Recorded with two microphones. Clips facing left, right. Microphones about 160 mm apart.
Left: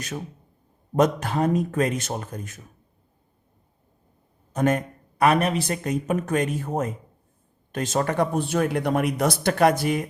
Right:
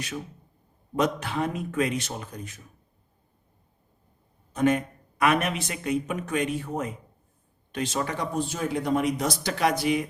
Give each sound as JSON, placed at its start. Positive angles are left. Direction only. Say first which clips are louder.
{"t": 0.9, "sound": "a man's voice", "louder": "left 5 dB", "side_deg": 45}
{"t": 4.5, "sound": "a man's voice", "louder": "left 1 dB", "side_deg": 45}